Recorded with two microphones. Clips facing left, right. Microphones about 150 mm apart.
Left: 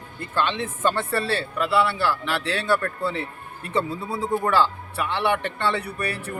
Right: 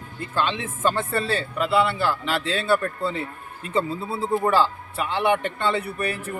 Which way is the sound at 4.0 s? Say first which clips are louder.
Even; 15° left (ahead or behind).